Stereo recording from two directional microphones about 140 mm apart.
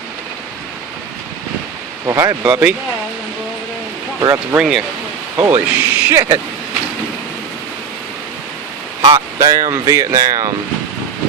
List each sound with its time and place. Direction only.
2.0 s speech: 20° right (ahead or behind)
2.5 s speech: 10° right (ahead or behind)
4.5 s speech: 5° right (ahead or behind); by 6.4 s 20° right (ahead or behind)
9.0 s speech: 20° right (ahead or behind)